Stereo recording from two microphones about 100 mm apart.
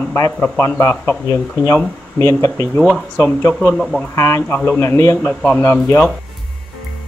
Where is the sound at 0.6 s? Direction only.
25° left (ahead or behind).